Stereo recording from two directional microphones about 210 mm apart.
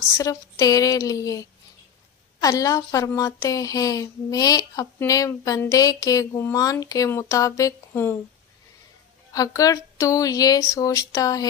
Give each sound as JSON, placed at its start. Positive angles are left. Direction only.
{"t": 0.2, "sound": "speech", "side_deg": 15}
{"t": 2.4, "sound": "speech", "side_deg": 15}
{"t": 9.3, "sound": "speech", "side_deg": 15}